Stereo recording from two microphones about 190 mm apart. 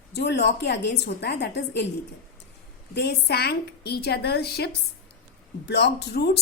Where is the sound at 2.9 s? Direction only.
60° left (ahead or behind).